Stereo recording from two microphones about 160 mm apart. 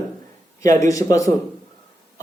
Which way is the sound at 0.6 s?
20° left (ahead or behind).